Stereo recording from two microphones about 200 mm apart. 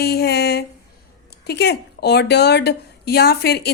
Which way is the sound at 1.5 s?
55° left (ahead or behind).